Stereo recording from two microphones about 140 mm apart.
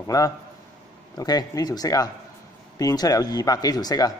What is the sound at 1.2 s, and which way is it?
Speech, 25° left (ahead or behind).